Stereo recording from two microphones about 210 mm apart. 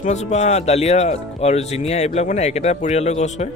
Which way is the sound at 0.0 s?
35° left (ahead or behind).